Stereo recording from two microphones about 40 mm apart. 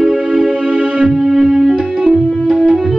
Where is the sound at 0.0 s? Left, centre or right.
Centre.